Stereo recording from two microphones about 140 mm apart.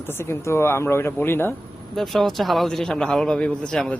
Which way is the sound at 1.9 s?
Centre (ahead or behind).